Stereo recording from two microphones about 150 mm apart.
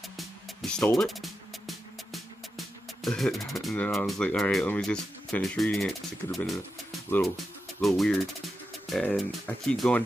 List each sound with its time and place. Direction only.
0.2 s music: centre (ahead or behind)
7.8 s speech: centre (ahead or behind)